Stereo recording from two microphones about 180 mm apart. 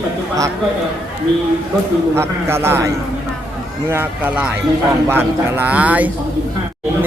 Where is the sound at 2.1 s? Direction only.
15° right (ahead or behind).